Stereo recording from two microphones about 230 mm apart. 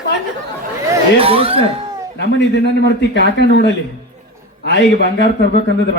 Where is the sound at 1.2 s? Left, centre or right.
Right.